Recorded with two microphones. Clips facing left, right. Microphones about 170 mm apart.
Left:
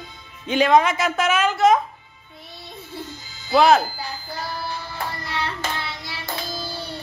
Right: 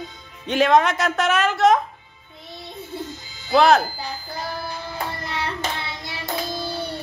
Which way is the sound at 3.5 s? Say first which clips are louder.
Even; centre (ahead or behind).